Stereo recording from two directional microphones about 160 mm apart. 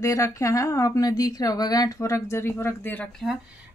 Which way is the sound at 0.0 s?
20° left (ahead or behind).